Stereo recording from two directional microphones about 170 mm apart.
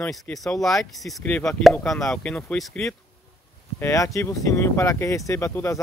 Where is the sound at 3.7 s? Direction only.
15° left (ahead or behind).